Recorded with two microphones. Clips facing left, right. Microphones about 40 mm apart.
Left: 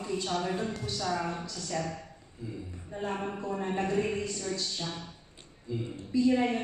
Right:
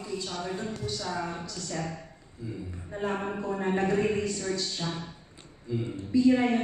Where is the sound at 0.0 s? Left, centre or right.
Left.